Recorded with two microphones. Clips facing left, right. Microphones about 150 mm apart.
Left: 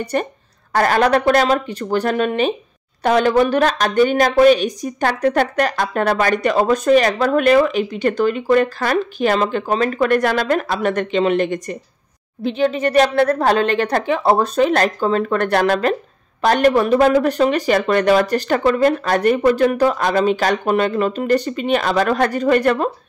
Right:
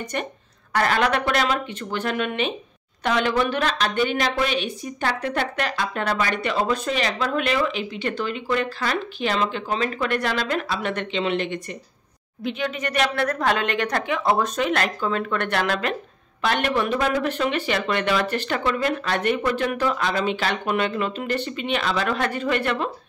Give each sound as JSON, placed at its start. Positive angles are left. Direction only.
{"t": 0.0, "sound": "speech", "side_deg": 35}
{"t": 12.4, "sound": "speech", "side_deg": 30}